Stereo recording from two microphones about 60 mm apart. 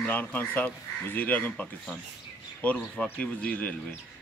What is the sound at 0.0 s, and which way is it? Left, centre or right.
Speech, left.